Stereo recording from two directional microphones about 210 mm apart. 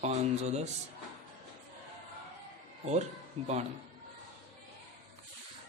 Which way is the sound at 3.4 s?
25° right (ahead or behind).